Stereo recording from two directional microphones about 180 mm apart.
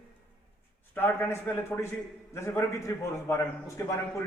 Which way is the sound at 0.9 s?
15° left (ahead or behind).